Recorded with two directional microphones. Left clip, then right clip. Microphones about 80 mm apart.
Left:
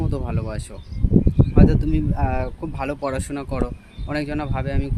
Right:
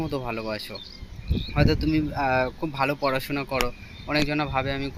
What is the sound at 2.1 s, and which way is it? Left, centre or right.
Speech, left.